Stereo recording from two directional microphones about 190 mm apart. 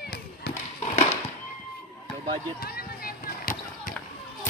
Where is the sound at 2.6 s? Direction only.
50° left (ahead or behind).